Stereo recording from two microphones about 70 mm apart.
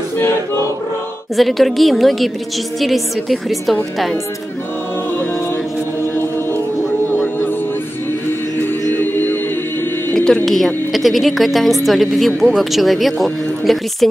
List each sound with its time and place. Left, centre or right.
1.3 s a woman's voice: centre
7.1 s a sound: left
8.9 s a capella: left
10.1 s a woman's voice: centre